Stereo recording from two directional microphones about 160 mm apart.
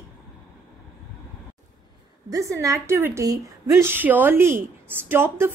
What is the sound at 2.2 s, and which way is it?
A woman's voice, 20° right (ahead or behind).